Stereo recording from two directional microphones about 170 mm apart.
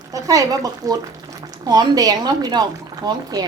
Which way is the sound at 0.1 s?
20° right (ahead or behind).